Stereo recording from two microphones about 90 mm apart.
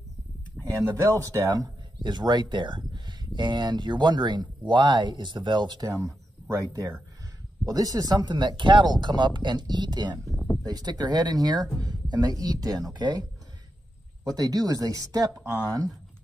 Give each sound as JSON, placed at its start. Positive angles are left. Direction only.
{"t": 0.6, "sound": "a sound", "side_deg": -10}
{"t": 0.9, "sound": "speech", "side_deg": -35}
{"t": 2.0, "sound": "speech", "side_deg": -55}
{"t": 5.9, "sound": "speech", "side_deg": -35}
{"t": 7.6, "sound": "speech", "side_deg": -45}
{"t": 10.3, "sound": "a sound", "side_deg": 15}
{"t": 10.6, "sound": "speech", "side_deg": -50}
{"t": 14.2, "sound": "speech", "side_deg": -45}